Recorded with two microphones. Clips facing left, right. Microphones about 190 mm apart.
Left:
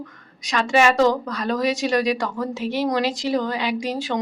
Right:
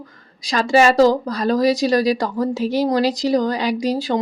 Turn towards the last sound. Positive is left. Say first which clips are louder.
# right 5 dB
turn(degrees=-35)  # may be behind; listen again after turning